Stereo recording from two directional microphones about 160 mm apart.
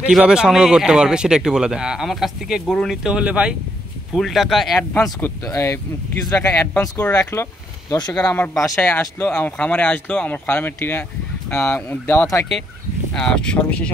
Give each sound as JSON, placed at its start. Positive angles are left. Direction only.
{"t": 0.0, "sound": "speech", "side_deg": -5}
{"t": 5.2, "sound": "speech", "side_deg": 20}
{"t": 13.1, "sound": "speech", "side_deg": 5}